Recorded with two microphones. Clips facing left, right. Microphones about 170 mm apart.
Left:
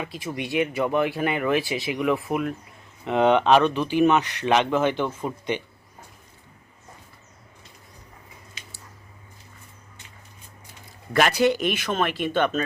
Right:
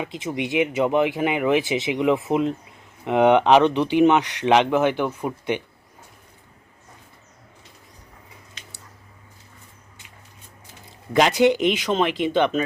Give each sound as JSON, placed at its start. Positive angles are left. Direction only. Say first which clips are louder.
{"t": 0.0, "sound": "speech", "louder": "right 4 dB", "side_deg": -20}
{"t": 8.6, "sound": "squish", "louder": "even", "side_deg": 5}
{"t": 11.1, "sound": "speech", "louder": "right 3 dB", "side_deg": -20}